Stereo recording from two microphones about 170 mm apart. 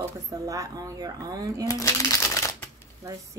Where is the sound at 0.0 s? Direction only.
20° right (ahead or behind).